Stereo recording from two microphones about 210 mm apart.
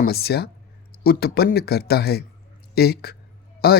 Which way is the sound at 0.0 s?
50° left (ahead or behind).